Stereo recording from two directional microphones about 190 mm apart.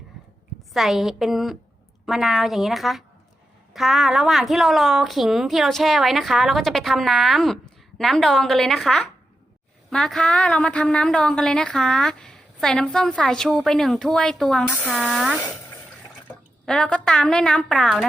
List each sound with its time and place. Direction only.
0.7 s a woman's voice: centre (ahead or behind)
16.6 s a woman's voice: 5° left (ahead or behind)